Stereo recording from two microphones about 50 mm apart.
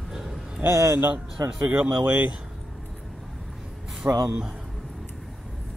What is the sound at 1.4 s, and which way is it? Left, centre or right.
Speech, right.